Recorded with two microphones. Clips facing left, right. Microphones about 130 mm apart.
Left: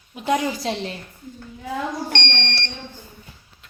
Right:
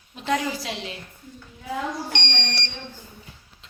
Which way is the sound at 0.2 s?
20° left (ahead or behind).